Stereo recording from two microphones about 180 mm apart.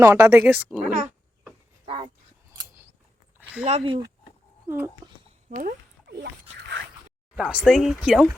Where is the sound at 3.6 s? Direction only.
35° right (ahead or behind).